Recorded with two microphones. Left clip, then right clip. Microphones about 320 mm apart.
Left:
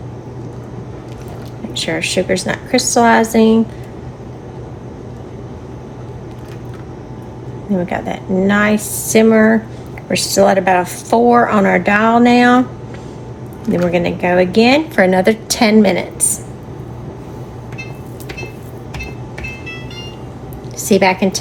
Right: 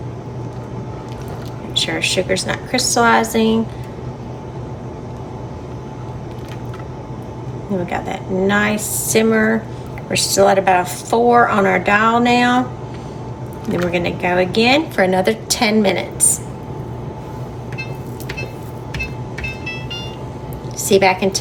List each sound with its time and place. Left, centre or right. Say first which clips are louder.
1.7 s a woman's voice: even; centre
7.9 s a woman's voice: left 2 dB; left
13.9 s a woman's voice: left 3 dB; left
20.7 s a woman's voice: left 1 dB; left